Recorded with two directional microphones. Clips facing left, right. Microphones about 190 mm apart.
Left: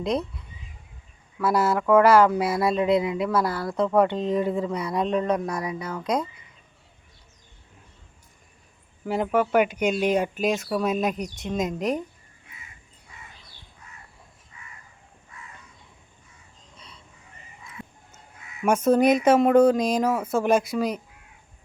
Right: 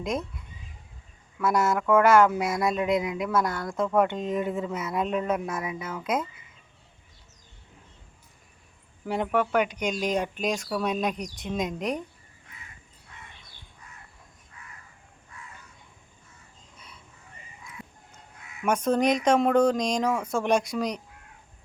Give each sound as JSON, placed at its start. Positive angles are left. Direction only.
{"t": 1.4, "sound": "speech", "side_deg": 5}
{"t": 4.1, "sound": "speech", "side_deg": 30}
{"t": 4.4, "sound": "speech", "side_deg": 0}
{"t": 9.0, "sound": "speech", "side_deg": 0}
{"t": 14.5, "sound": "crow", "side_deg": 5}
{"t": 17.6, "sound": "a sound", "side_deg": 0}
{"t": 18.6, "sound": "speech", "side_deg": 10}